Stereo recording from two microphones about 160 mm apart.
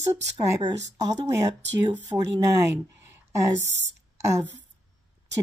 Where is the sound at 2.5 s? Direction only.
15° right (ahead or behind).